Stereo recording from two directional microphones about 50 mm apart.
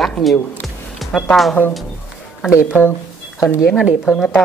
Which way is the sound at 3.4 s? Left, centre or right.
Left.